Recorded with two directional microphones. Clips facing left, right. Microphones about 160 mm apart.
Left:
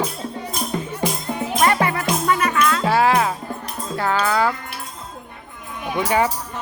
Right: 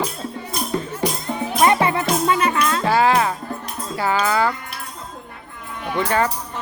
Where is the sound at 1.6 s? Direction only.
20° right (ahead or behind).